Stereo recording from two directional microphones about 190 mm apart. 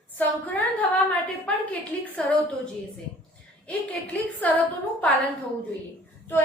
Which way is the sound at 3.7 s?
5° left (ahead or behind).